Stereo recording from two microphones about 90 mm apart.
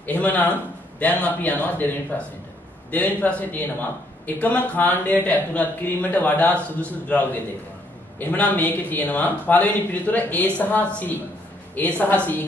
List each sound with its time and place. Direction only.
0.0 s a man's voice: 20° left (ahead or behind)